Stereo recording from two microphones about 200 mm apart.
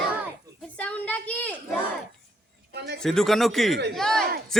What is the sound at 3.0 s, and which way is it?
A woman's voice, centre (ahead or behind).